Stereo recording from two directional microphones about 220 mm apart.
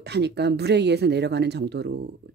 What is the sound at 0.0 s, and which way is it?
Speech, 50° right (ahead or behind).